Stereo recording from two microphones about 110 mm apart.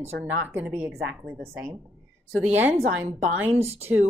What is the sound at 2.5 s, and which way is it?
Speech, 20° right (ahead or behind).